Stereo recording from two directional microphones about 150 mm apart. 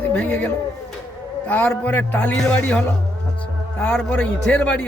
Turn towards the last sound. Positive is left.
turn(degrees=10)  # may be behind; listen again after turning